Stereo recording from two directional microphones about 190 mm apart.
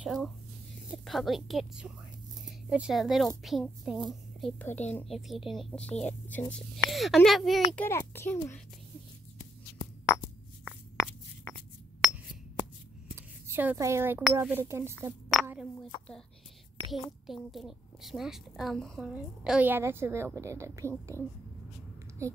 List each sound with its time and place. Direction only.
0.0 s a sound: centre (ahead or behind)
0.9 s a child's voice: centre (ahead or behind)
7.7 s a child's voice: 10° left (ahead or behind)
13.1 s speech: 10° right (ahead or behind)
16.9 s a child's voice: centre (ahead or behind)
21.1 s a child's voice: 15° left (ahead or behind)
22.2 s speech: 15° right (ahead or behind)